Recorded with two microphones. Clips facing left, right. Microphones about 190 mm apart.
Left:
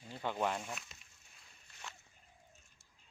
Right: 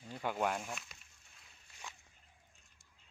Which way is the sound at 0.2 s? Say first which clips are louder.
Right 1 dB; 10° right (ahead or behind).